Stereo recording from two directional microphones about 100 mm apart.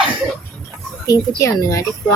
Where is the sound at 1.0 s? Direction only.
35° left (ahead or behind).